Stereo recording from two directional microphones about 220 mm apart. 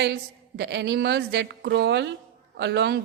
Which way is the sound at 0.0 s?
50° right (ahead or behind).